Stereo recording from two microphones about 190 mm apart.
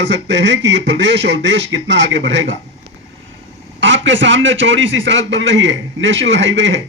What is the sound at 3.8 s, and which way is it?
A man's voice, 75° right (ahead or behind).